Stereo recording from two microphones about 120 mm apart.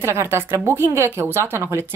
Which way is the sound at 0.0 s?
20° right (ahead or behind).